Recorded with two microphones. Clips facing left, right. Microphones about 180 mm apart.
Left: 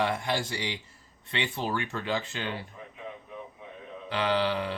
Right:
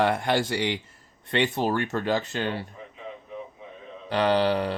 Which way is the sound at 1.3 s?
45° right (ahead or behind).